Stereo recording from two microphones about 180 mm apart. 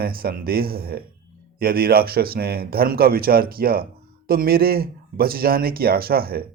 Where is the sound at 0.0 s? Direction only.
55° right (ahead or behind).